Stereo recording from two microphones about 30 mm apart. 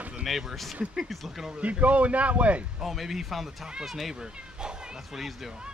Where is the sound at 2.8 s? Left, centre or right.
Centre.